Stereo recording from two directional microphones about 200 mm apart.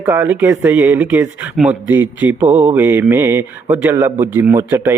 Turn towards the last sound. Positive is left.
turn(degrees=-10)  # may be behind; listen again after turning